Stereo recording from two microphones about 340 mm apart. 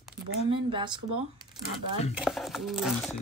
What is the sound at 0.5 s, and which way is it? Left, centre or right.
Speech, centre.